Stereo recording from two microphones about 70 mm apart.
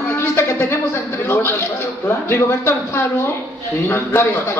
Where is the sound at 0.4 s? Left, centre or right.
Left.